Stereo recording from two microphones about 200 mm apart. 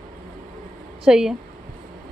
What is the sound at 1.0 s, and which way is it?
Speech, 5° right (ahead or behind).